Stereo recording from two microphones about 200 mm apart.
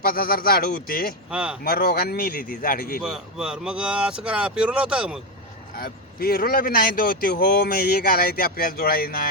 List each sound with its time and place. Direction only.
0.0 s a man's voice: 50° left (ahead or behind)
1.3 s speech: 5° right (ahead or behind)
1.6 s a man's voice: 50° left (ahead or behind)
3.0 s speech: 5° right (ahead or behind)
5.7 s a man's voice: 50° left (ahead or behind)